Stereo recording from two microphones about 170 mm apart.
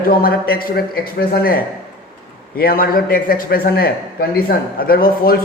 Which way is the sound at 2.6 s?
60° left (ahead or behind).